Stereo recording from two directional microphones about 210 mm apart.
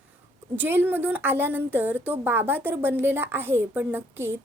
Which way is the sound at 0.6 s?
10° right (ahead or behind).